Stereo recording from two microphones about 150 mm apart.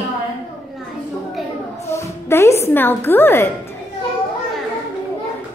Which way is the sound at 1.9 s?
15° left (ahead or behind).